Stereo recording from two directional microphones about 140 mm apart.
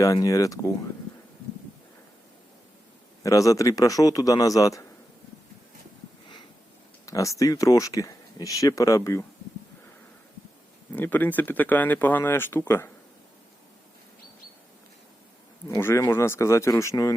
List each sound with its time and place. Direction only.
0.0 s speech: 25° left (ahead or behind)
3.2 s speech: 25° left (ahead or behind)
7.0 s speech: 25° left (ahead or behind)
10.9 s speech: 15° left (ahead or behind)
15.8 s speech: 15° left (ahead or behind)